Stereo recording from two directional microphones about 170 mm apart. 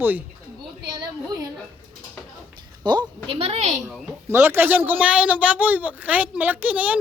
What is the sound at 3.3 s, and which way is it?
Speech, 35° right (ahead or behind).